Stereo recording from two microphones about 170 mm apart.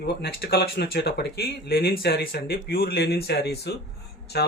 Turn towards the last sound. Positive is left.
turn(degrees=75)  # may be behind; listen again after turning